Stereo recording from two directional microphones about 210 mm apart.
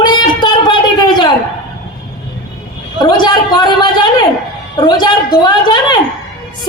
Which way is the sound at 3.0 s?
20° left (ahead or behind).